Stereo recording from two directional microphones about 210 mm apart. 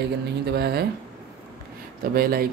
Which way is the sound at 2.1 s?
45° right (ahead or behind).